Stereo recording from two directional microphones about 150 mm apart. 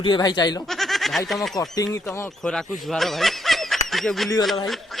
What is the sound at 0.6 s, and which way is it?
Speech, centre (ahead or behind).